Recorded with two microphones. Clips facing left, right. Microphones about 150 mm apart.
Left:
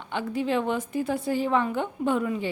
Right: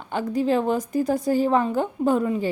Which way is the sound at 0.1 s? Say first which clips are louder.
Right 4 dB; 40° right (ahead or behind).